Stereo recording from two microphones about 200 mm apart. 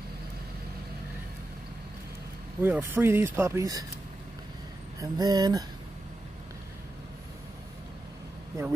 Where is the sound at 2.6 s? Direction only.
10° right (ahead or behind).